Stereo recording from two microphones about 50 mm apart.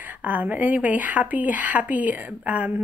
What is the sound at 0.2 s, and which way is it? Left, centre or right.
A woman's voice, right.